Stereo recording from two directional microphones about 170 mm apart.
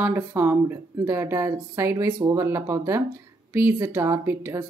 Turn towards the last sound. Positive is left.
turn(degrees=-15)  # may be behind; listen again after turning